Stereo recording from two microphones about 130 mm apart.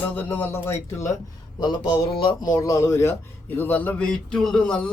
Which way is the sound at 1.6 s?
40° left (ahead or behind).